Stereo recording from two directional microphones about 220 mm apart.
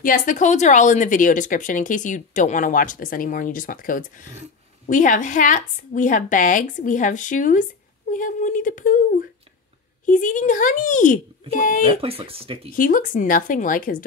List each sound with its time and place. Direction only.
0.0 s speech: 35° left (ahead or behind)
10.0 s speech: 35° left (ahead or behind)
12.0 s speech: 25° right (ahead or behind)
12.7 s speech: 40° left (ahead or behind)